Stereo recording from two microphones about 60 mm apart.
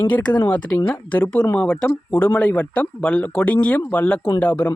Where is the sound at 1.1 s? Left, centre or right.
Left.